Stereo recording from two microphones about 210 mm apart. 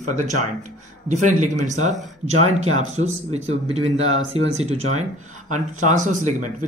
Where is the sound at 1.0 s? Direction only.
35° right (ahead or behind).